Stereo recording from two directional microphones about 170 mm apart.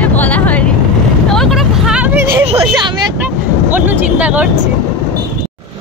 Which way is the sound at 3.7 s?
10° right (ahead or behind).